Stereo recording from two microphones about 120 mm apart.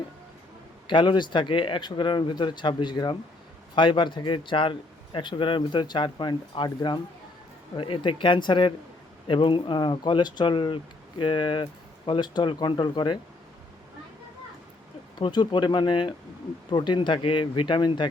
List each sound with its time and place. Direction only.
0.9 s a man's voice: 40° left (ahead or behind)
15.2 s speech: 40° left (ahead or behind)